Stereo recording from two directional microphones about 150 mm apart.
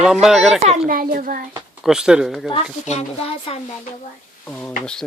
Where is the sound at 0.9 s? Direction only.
65° right (ahead or behind).